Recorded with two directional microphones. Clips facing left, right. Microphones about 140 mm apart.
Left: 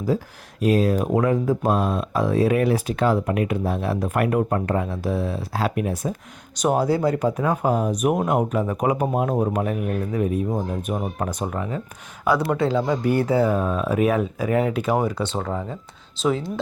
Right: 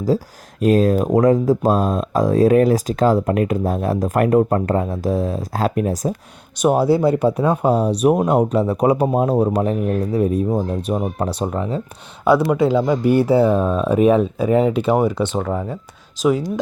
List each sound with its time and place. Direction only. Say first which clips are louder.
0.1 s speech: right 4 dB; 40° right (ahead or behind)
6.9 s speech: right 5 dB; 25° right (ahead or behind)
12.5 s speech: right 5 dB; 15° right (ahead or behind)
15.4 s speech: right 5 dB; 5° right (ahead or behind)